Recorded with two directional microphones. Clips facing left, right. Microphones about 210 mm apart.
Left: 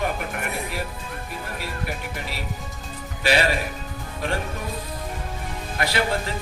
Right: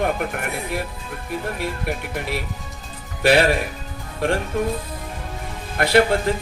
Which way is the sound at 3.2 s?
60° right (ahead or behind).